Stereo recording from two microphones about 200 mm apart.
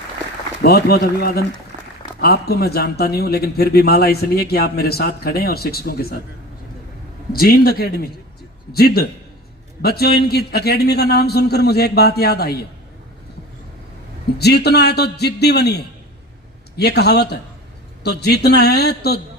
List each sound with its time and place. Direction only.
0.6 s a man's voice: 55° left (ahead or behind)
7.3 s a man's voice: 50° left (ahead or behind)
14.3 s a man's voice: 55° left (ahead or behind)